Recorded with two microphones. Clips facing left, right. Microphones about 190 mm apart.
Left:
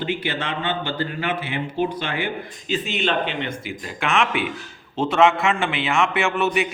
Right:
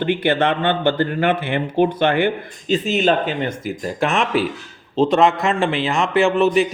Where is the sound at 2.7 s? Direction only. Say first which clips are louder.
Right 7 dB; 40° right (ahead or behind).